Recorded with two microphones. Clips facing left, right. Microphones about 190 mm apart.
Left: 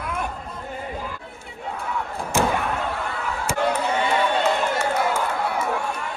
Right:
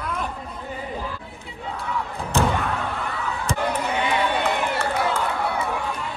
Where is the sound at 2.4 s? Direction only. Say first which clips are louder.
Even; 15° left (ahead or behind).